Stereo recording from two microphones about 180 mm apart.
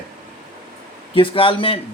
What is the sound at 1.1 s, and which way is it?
Speech, 30° left (ahead or behind).